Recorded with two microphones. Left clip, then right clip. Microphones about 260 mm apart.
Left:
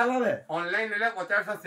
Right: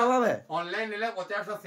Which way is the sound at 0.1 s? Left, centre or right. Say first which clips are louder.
Right 2 dB; centre.